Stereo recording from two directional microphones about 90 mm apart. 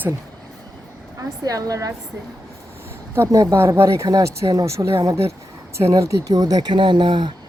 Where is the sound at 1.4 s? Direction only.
40° right (ahead or behind).